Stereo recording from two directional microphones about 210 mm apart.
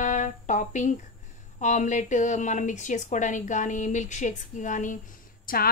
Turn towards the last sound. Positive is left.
turn(degrees=45)  # may be behind; listen again after turning